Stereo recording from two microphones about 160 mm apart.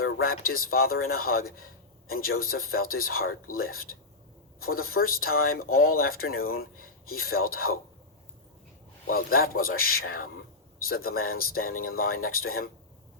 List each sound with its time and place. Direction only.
0.2 s speech: 65° left (ahead or behind)
9.0 s a man's voice: 65° left (ahead or behind)